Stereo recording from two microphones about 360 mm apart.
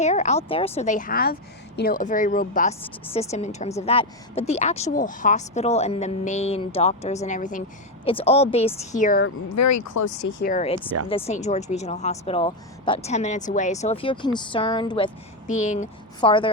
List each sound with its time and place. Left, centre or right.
0.0 s a woman's voice: centre
9.5 s speech: left
10.2 s a woman's voice: left; by 16.5 s centre